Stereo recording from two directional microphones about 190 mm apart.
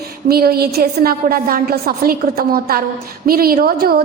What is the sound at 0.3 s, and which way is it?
A woman's voice, 55° right (ahead or behind).